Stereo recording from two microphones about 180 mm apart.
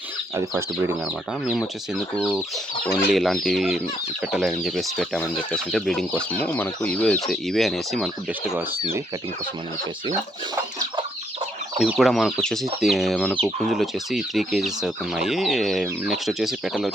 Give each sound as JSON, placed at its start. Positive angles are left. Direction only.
{"t": 0.3, "sound": "speech", "side_deg": -15}
{"t": 2.8, "sound": "speech", "side_deg": 0}
{"t": 10.1, "sound": "speech", "side_deg": -25}
{"t": 11.8, "sound": "speech", "side_deg": 0}